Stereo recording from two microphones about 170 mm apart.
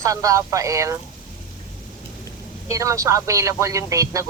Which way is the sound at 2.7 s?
20° right (ahead or behind).